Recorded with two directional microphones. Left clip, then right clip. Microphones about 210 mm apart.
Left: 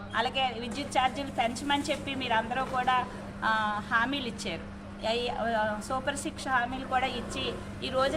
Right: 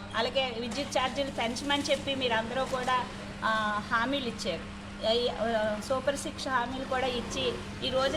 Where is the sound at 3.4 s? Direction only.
25° left (ahead or behind).